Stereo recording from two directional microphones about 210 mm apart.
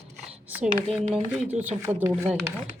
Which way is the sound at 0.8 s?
5° right (ahead or behind).